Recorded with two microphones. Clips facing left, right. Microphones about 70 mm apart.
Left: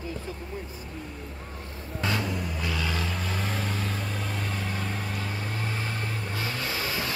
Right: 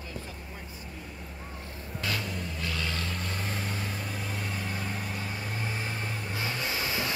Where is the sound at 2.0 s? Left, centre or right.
Left.